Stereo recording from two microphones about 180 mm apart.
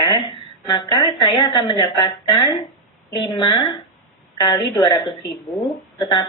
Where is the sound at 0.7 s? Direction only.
20° left (ahead or behind).